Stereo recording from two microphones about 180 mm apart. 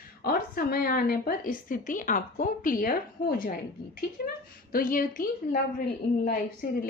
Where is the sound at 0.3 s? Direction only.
55° left (ahead or behind).